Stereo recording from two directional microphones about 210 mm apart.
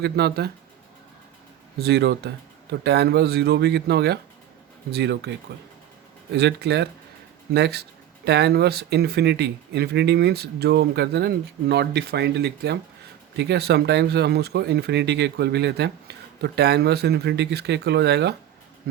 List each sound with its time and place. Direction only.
0.0 s speech: 50° right (ahead or behind)
1.8 s speech: 50° right (ahead or behind)